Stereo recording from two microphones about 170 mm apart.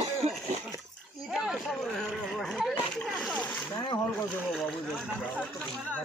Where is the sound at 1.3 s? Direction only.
Centre (ahead or behind).